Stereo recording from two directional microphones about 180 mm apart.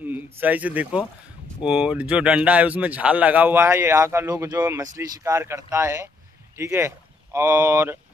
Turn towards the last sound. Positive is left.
turn(degrees=-15)  # may be behind; listen again after turning